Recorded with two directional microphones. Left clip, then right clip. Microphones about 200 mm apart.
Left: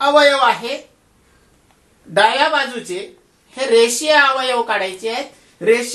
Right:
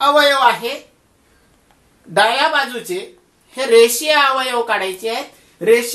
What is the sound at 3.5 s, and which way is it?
Speech, 5° left (ahead or behind).